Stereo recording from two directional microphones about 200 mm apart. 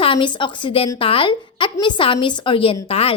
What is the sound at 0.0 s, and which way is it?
A woman's voice, 25° left (ahead or behind).